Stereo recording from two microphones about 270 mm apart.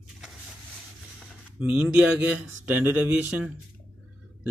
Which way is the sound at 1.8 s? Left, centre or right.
Centre.